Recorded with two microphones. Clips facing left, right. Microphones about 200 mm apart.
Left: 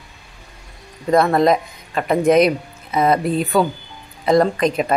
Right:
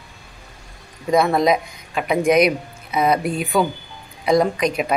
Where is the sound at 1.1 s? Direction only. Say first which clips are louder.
Left 2 dB; centre (ahead or behind).